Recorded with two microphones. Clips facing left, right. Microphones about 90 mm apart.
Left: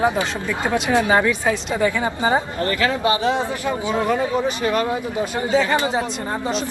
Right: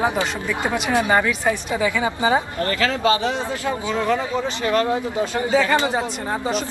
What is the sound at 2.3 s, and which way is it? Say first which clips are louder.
Speech: even; 25° left (ahead or behind).